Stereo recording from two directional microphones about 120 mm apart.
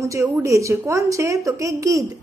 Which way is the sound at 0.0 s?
25° right (ahead or behind).